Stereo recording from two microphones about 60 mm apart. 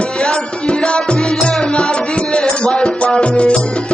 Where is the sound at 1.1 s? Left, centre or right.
Centre.